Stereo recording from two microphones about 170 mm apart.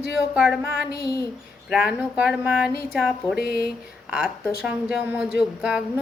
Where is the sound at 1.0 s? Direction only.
20° left (ahead or behind).